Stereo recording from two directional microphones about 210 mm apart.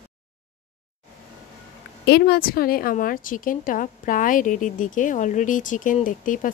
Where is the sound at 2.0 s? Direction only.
50° left (ahead or behind).